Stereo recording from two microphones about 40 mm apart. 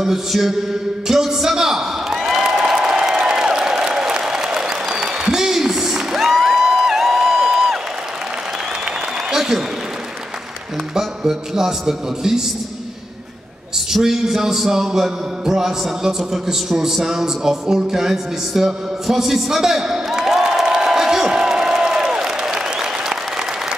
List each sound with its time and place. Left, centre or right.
0.0 s a man's voice: centre
2.6 s a sound: centre
9.3 s applause: centre
11.0 s a man's voice: centre
14.0 s a man's voice: centre
20.6 s a sound: centre